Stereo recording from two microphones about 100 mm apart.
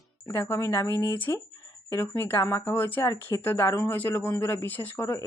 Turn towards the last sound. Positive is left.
turn(degrees=25)  # may be behind; listen again after turning